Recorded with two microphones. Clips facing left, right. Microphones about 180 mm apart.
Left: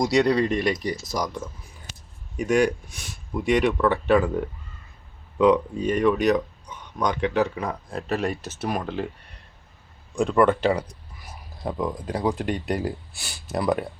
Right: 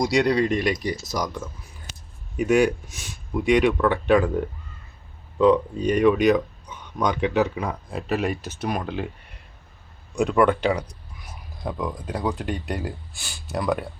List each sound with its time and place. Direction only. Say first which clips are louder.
0.0 s speech: even; centre (ahead or behind)
5.4 s speech: right 1 dB; 20° left (ahead or behind)
5.8 s speech: right 4 dB; centre (ahead or behind)
10.2 s speech: even; centre (ahead or behind)